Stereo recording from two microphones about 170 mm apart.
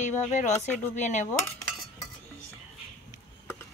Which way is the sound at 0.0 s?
45° left (ahead or behind).